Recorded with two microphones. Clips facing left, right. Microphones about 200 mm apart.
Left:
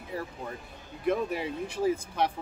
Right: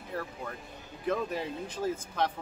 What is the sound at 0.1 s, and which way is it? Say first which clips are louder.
Speech: left 1 dB; 10° left (ahead or behind).